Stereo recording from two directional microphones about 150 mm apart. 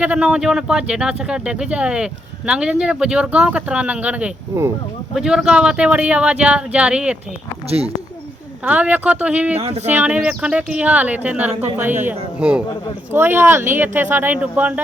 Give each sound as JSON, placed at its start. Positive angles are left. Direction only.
{"t": 0.0, "sound": "speech", "side_deg": -5}
{"t": 7.7, "sound": "speech", "side_deg": -40}
{"t": 8.6, "sound": "speech", "side_deg": -10}
{"t": 9.6, "sound": "speech", "side_deg": -45}
{"t": 9.9, "sound": "speech", "side_deg": -10}